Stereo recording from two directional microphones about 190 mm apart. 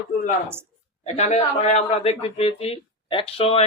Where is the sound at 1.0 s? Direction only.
35° left (ahead or behind).